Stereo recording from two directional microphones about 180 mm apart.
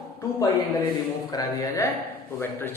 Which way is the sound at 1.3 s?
20° left (ahead or behind).